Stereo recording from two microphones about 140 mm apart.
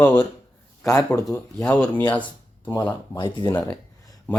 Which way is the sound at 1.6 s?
10° left (ahead or behind).